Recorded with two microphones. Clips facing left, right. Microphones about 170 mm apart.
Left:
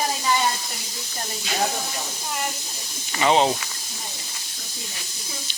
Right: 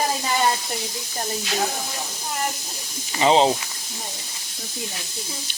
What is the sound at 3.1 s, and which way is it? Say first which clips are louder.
Speech: right 2 dB; 25° right (ahead or behind).